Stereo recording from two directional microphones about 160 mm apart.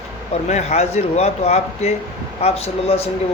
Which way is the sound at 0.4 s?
45° left (ahead or behind).